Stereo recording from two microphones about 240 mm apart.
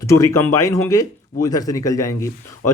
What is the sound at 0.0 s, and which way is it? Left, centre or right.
Speech, centre.